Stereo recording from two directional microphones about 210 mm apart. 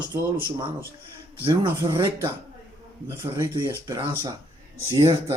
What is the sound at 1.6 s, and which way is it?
Speech, 20° right (ahead or behind).